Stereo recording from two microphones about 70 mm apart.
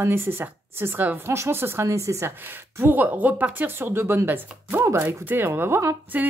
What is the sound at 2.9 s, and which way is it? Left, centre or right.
Speech, right.